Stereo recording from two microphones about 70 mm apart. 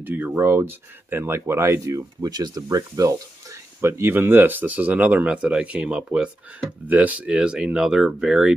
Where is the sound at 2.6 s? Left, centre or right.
Right.